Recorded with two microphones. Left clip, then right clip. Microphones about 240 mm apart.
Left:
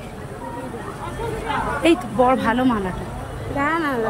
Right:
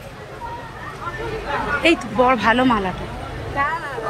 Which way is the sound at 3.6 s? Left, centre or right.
Left.